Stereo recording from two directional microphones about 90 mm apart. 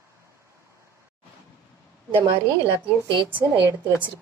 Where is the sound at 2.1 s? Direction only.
75° right (ahead or behind).